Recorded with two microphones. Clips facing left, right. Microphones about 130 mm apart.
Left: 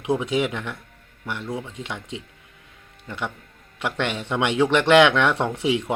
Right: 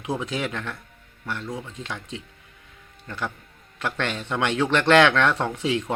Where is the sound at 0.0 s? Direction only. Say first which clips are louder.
Left 5 dB; 20° left (ahead or behind).